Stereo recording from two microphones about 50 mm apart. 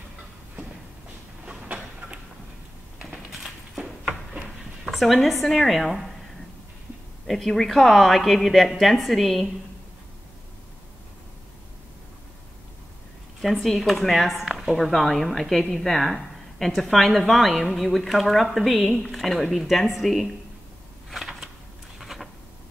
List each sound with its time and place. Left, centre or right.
1.4 s train: centre
3.8 s a sound: centre
4.8 s a woman's voice: centre
7.2 s speech: centre
13.4 s speech: centre
21.1 s typewriter: centre
21.9 s a sound: centre